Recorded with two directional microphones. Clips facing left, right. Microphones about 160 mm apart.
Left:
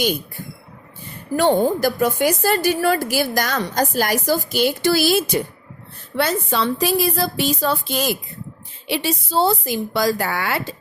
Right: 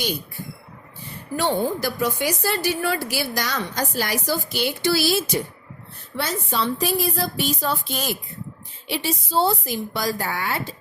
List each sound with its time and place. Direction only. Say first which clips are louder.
1.4 s a woman's voice: left 6 dB; 50° left (ahead or behind)
6.1 s a woman's voice: left 5 dB; 70° left (ahead or behind); by 8.1 s 90° left
8.9 s a woman's voice: left 3 dB; 80° left